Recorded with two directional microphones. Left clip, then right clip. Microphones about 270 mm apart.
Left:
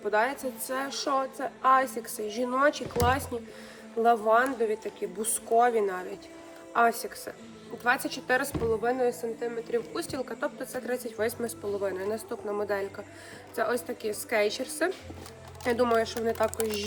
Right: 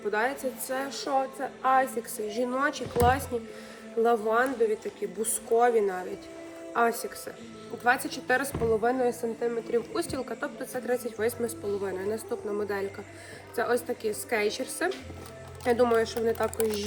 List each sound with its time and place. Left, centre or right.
0.1 s a woman's voice: centre